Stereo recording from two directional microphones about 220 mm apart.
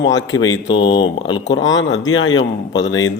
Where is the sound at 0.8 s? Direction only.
25° left (ahead or behind).